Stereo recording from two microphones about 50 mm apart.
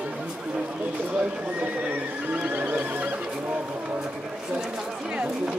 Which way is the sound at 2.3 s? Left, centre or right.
Right.